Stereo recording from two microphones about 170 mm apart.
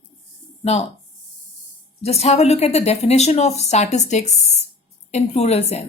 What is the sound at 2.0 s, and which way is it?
A woman's voice, 40° left (ahead or behind).